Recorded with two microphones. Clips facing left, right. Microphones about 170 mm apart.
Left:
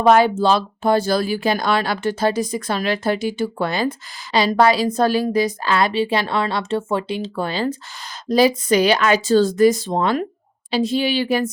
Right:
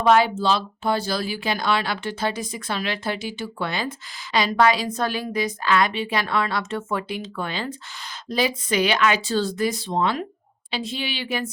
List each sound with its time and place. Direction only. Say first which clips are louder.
0.0 s speech: left 4 dB; 45° left (ahead or behind)